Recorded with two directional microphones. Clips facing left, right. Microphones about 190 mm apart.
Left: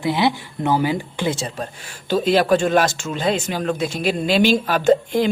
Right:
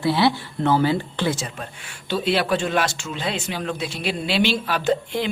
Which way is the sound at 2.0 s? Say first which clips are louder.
Left 5 dB; 45° left (ahead or behind).